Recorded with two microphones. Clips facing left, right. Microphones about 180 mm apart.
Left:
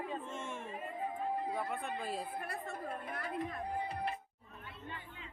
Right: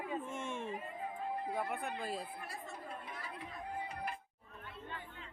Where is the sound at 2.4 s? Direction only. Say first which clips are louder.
Left 5 dB; 60° left (ahead or behind).